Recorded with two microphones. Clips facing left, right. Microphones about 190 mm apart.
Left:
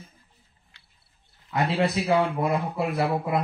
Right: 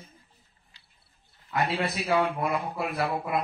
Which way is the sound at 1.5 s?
20° left (ahead or behind).